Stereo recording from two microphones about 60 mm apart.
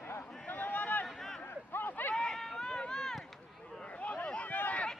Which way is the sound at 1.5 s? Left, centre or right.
Left.